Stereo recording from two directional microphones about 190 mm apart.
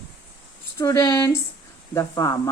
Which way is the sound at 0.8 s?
15° left (ahead or behind).